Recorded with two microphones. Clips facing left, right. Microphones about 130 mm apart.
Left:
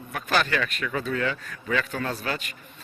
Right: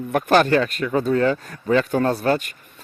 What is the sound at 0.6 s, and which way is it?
Speech, 35° right (ahead or behind).